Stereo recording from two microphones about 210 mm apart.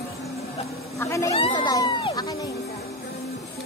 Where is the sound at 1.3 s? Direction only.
25° left (ahead or behind).